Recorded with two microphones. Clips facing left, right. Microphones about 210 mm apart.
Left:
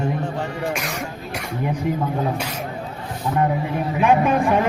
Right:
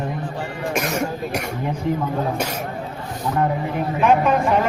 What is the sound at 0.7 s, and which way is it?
Speech, 45° right (ahead or behind).